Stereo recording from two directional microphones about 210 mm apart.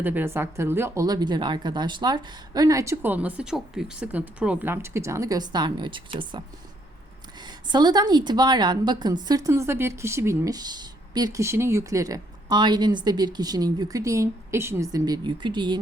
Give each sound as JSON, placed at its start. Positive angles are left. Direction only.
{"t": 0.0, "sound": "speech", "side_deg": -10}
{"t": 7.4, "sound": "a woman's voice", "side_deg": -20}